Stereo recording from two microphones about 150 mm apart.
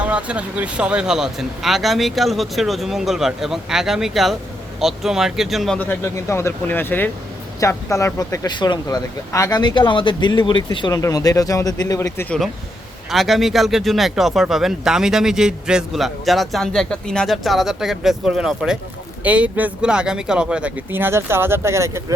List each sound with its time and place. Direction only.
0.0 s speech: 10° right (ahead or behind); by 12.4 s 15° left (ahead or behind)
13.1 s speech: centre (ahead or behind); by 22.0 s 20° right (ahead or behind)